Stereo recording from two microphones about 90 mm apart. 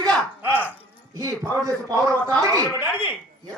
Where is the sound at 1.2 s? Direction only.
40° right (ahead or behind).